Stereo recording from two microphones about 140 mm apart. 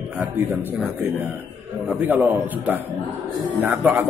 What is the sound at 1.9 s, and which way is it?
A man's voice, 10° right (ahead or behind).